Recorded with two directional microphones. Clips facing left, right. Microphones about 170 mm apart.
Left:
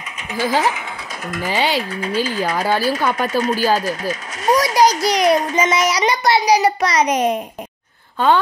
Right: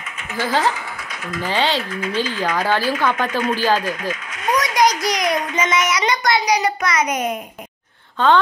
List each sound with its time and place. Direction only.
0.3 s speech: 10° left (ahead or behind)
1.9 s a child's voice: 30° left (ahead or behind)
2.5 s speech: 10° left (ahead or behind)
3.3 s a child's voice: 40° left (ahead or behind)
3.5 s speech: 10° left (ahead or behind)
3.8 s a child's voice: 40° left (ahead or behind)
8.2 s speech: 10° left (ahead or behind)